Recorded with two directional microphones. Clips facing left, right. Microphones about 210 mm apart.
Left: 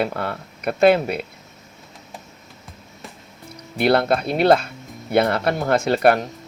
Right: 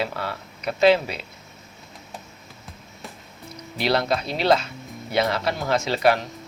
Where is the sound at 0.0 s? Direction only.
55° left (ahead or behind).